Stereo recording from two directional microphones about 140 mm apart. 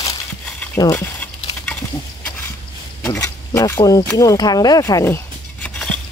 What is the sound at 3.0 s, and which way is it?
Speech, 20° left (ahead or behind).